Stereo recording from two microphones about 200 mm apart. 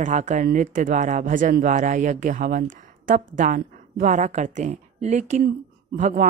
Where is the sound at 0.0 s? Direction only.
35° right (ahead or behind).